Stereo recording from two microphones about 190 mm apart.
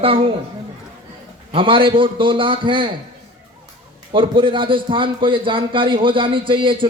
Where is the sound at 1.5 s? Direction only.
25° right (ahead or behind).